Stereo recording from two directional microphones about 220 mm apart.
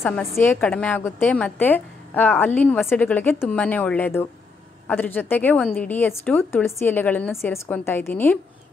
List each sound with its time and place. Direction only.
0.0 s a woman's voice: 10° left (ahead or behind)